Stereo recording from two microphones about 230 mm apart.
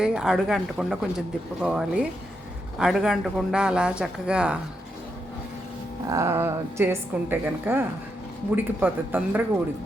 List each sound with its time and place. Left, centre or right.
0.0 s speech: centre
6.1 s a woman's voice: centre